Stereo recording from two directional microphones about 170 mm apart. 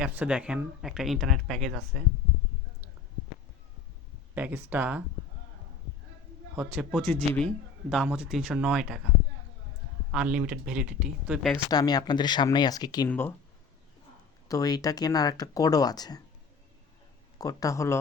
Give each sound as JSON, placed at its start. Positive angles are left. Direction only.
{"t": 0.0, "sound": "speech", "side_deg": -10}
{"t": 4.4, "sound": "speech", "side_deg": -10}
{"t": 6.6, "sound": "speech", "side_deg": 0}
{"t": 10.1, "sound": "speech", "side_deg": -5}
{"t": 11.7, "sound": "speech", "side_deg": 25}
{"t": 13.1, "sound": "speech", "side_deg": 15}
{"t": 14.4, "sound": "speech", "side_deg": 20}
{"t": 17.3, "sound": "speech", "side_deg": 20}